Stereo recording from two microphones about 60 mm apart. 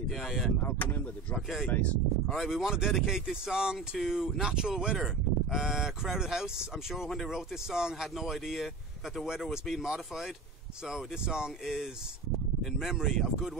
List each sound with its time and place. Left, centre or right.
0.1 s speech: centre
1.7 s speech: left
2.2 s speech: centre